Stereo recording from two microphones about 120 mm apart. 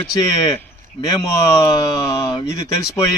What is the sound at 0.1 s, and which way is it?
Speech, 35° left (ahead or behind).